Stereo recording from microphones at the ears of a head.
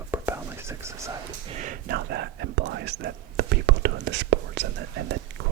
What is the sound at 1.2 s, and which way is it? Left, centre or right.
Whispering, right.